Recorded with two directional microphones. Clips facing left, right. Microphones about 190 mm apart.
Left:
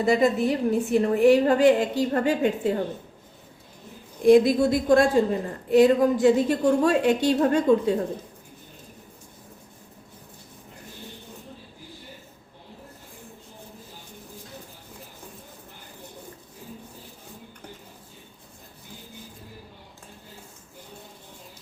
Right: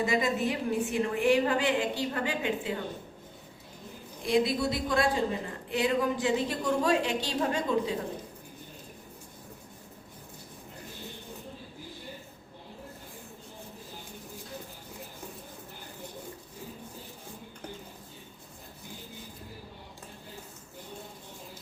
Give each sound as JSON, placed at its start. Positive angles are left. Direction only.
{"t": 0.0, "sound": "a woman's voice", "side_deg": 35}
{"t": 4.3, "sound": "a woman's voice", "side_deg": 45}